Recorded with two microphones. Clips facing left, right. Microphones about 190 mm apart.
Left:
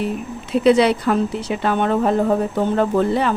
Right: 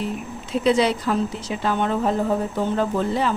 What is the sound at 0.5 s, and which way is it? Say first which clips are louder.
Speech: left 5 dB; 65° left (ahead or behind).